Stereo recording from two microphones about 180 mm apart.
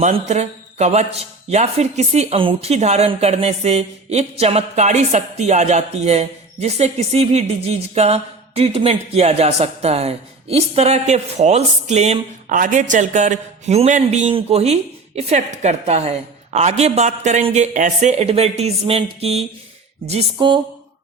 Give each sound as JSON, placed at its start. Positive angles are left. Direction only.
{"t": 0.0, "sound": "a man's voice", "side_deg": -40}